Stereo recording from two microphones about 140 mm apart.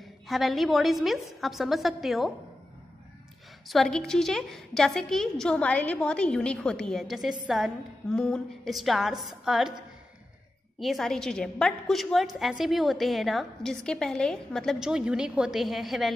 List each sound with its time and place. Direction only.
0.3 s a woman's voice: centre (ahead or behind)
3.6 s a woman's voice: centre (ahead or behind)
10.8 s a woman's voice: centre (ahead or behind)